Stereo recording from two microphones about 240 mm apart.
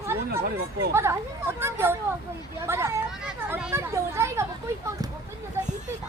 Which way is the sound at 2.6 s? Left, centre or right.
Centre.